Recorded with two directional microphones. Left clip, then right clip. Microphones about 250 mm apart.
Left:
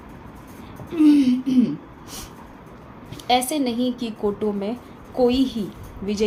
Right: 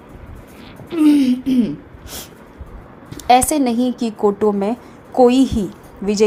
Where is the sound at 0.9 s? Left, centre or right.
Right.